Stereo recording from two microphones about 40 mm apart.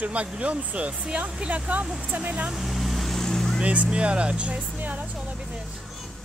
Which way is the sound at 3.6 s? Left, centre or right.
Right.